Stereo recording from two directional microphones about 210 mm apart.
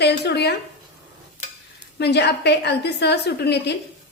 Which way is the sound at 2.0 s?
55° left (ahead or behind).